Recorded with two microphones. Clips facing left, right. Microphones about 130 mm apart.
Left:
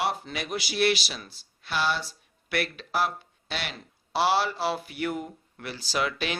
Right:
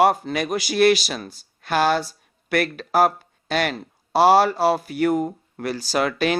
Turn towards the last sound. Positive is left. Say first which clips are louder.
# right 8 dB
turn(degrees=-45)  # may be behind; listen again after turning